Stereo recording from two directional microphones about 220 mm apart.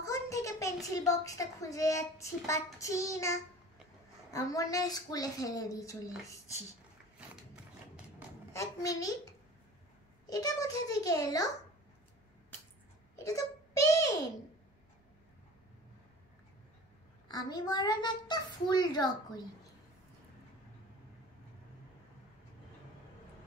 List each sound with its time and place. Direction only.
0.0 s a sound: 15° left (ahead or behind)
0.8 s speech: 15° left (ahead or behind)
8.5 s speech: 15° left (ahead or behind)
10.3 s speech: 15° left (ahead or behind)
13.1 s a sound: 15° left (ahead or behind)
17.3 s a child's voice: 20° left (ahead or behind)